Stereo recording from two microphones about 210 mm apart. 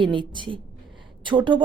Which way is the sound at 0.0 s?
25° right (ahead or behind).